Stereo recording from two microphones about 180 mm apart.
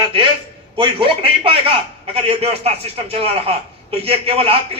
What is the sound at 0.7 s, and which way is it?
A man's voice, 30° right (ahead or behind).